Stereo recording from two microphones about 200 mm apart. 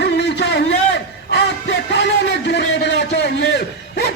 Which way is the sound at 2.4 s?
60° left (ahead or behind).